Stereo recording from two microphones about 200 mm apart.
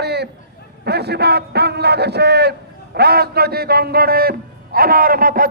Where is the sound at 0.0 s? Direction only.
55° right (ahead or behind).